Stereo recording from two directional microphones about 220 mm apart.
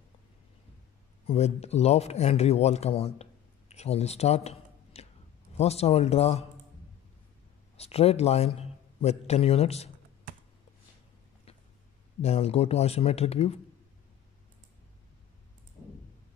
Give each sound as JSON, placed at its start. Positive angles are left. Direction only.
{"t": 1.2, "sound": "speech", "side_deg": 30}
{"t": 7.7, "sound": "a man's voice", "side_deg": 25}
{"t": 12.2, "sound": "speech", "side_deg": 30}